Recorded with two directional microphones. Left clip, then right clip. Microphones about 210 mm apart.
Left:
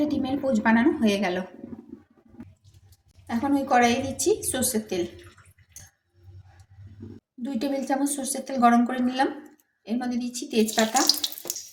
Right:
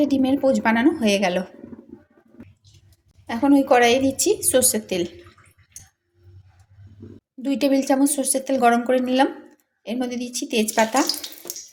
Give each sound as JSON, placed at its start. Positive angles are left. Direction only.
{"t": 0.0, "sound": "a woman's voice", "side_deg": -35}
{"t": 3.2, "sound": "a woman's voice", "side_deg": -40}
{"t": 7.4, "sound": "a woman's voice", "side_deg": -40}